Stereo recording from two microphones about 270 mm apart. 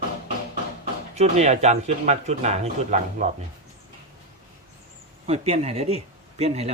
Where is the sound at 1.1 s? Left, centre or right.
Right.